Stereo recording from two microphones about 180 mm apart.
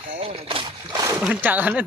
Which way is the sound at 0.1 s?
35° right (ahead or behind).